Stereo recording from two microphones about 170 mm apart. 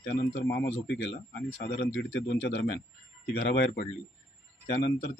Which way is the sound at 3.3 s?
70° left (ahead or behind).